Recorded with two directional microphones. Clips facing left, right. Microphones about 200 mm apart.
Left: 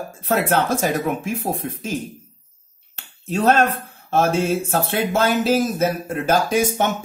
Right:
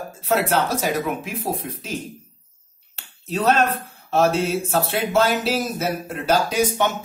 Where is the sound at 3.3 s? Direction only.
50° left (ahead or behind).